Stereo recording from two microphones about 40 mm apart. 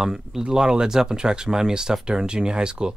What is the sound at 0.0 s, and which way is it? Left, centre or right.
Speech, centre.